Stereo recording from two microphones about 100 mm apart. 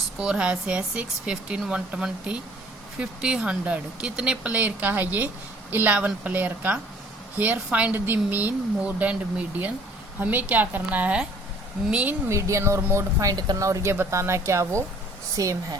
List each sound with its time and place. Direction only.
0.2 s speech: 10° right (ahead or behind)
12.3 s speech: 30° right (ahead or behind)